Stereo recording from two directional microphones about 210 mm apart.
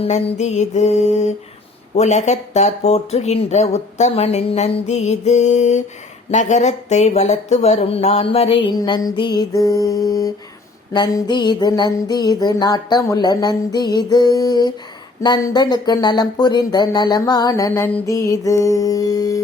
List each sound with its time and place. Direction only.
0.0 s speech: 30° left (ahead or behind)
10.9 s a sound: 20° left (ahead or behind)
15.2 s speech: 20° left (ahead or behind)